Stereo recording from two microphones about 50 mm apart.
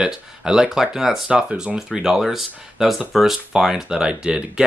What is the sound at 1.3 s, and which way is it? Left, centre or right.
Speech, right.